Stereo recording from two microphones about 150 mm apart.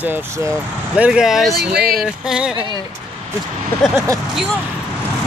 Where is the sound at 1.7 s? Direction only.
90° right.